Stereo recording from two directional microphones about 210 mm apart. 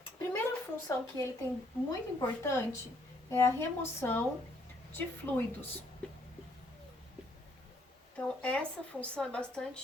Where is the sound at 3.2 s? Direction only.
15° left (ahead or behind).